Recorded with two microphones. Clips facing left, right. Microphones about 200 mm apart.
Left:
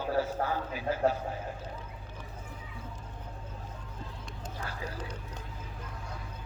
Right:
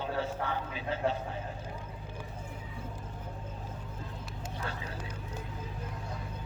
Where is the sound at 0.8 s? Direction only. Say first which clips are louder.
Left 5 dB; 25° right (ahead or behind).